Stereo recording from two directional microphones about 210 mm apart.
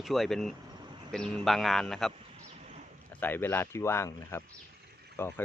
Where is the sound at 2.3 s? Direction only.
35° right (ahead or behind).